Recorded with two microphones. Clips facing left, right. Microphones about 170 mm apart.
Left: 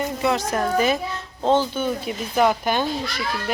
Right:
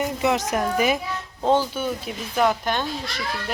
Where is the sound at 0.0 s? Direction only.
15° right (ahead or behind); by 2.8 s 5° left (ahead or behind).